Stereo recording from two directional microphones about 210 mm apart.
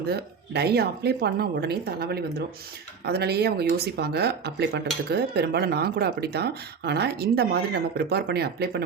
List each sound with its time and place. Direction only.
0.1 s speech: 50° right (ahead or behind)